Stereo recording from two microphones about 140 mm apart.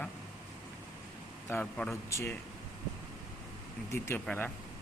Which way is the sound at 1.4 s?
10° left (ahead or behind).